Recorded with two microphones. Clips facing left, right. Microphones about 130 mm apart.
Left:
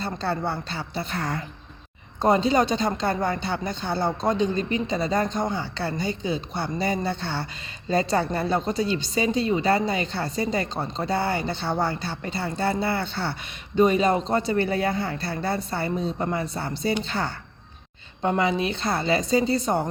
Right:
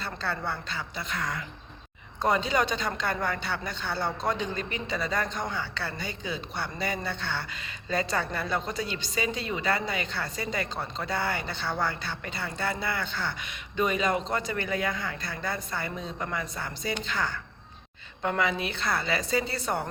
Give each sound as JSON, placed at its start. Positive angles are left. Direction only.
{"t": 0.0, "sound": "speech", "side_deg": 30}